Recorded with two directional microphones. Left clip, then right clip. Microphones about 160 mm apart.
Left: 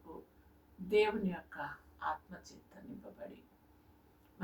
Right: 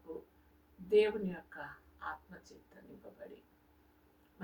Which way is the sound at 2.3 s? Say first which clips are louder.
Left 2 dB; 5° right (ahead or behind).